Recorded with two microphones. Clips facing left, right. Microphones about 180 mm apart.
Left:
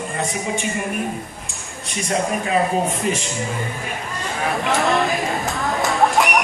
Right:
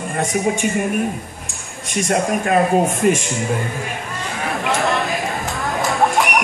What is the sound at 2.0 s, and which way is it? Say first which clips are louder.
A man's voice: right 3 dB; 50° right (ahead or behind).